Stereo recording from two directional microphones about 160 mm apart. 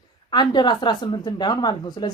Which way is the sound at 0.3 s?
30° left (ahead or behind).